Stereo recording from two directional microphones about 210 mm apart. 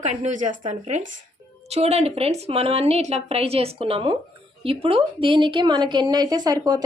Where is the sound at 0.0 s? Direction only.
35° right (ahead or behind).